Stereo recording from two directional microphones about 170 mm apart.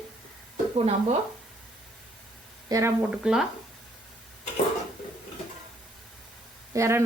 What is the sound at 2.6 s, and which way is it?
Speech, 20° right (ahead or behind).